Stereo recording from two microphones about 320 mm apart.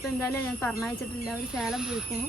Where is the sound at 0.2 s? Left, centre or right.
Centre.